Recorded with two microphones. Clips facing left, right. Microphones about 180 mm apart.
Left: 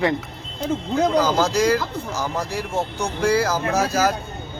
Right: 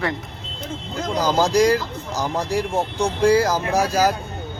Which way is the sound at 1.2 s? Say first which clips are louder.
Right 2 dB; 15° right (ahead or behind).